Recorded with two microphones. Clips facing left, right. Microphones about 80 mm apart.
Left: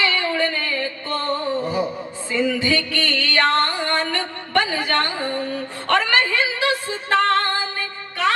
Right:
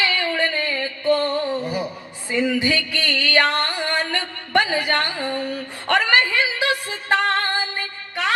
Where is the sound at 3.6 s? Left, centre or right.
Left.